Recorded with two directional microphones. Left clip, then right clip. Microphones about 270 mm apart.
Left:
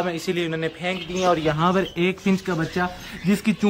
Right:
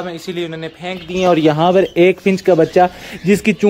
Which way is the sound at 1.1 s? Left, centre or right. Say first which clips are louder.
Right 9 dB; right.